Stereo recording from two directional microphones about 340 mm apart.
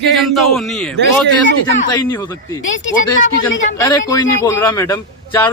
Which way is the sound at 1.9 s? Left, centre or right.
Centre.